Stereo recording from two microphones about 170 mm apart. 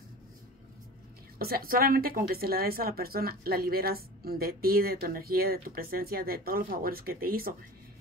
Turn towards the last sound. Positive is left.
turn(degrees=-60)  # may be behind; listen again after turning